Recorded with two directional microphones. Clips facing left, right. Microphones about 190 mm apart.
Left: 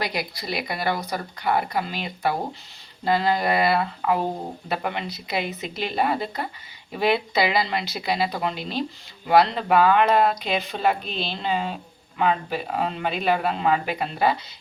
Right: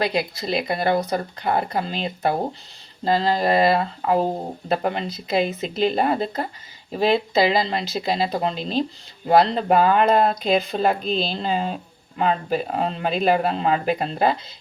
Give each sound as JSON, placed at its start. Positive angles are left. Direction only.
{"t": 0.0, "sound": "speech", "side_deg": -25}
{"t": 7.4, "sound": "speech", "side_deg": -30}